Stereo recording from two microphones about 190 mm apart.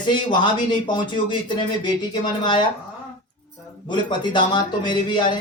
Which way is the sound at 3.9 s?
25° left (ahead or behind).